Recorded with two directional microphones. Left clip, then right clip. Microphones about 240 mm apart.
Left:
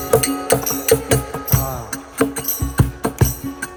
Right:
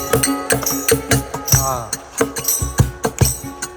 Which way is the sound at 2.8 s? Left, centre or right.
Right.